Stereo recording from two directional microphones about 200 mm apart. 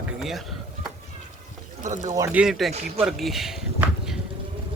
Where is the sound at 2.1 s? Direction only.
10° right (ahead or behind).